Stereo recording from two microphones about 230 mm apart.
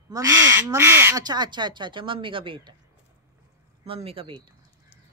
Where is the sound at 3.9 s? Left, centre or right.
Right.